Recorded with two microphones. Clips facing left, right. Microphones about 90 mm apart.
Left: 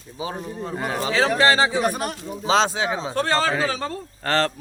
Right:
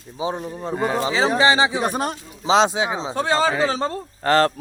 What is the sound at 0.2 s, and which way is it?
Speech, 20° right (ahead or behind).